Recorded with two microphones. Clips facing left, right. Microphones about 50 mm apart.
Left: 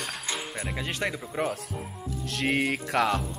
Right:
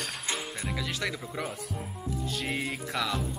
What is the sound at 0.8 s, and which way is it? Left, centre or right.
Speech, left.